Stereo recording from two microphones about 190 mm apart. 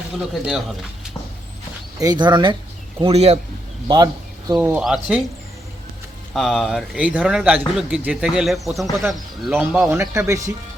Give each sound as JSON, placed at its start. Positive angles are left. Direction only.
{"t": 2.0, "sound": "a man's voice", "side_deg": -20}
{"t": 3.8, "sound": "speech", "side_deg": -20}
{"t": 4.6, "sound": "speech", "side_deg": -5}
{"t": 6.3, "sound": "speech", "side_deg": 0}